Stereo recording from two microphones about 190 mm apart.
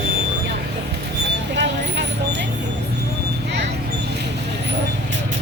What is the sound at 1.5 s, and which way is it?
Vehicle, 65° right (ahead or behind).